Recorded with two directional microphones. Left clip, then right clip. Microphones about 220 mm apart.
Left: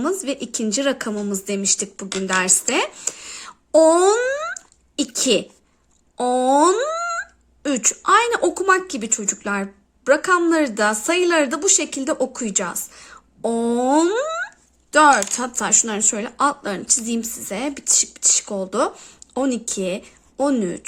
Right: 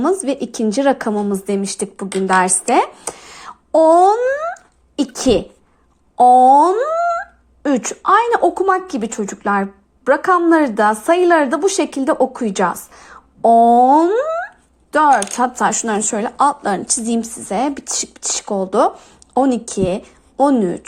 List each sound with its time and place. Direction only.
0.0 s speech: 5° left (ahead or behind)
1.1 s speech: 15° left (ahead or behind)
1.5 s speech: 5° left (ahead or behind)
4.9 s speech: 5° left (ahead or behind)
12.9 s a sound: 10° left (ahead or behind)
14.9 s speech: 10° left (ahead or behind)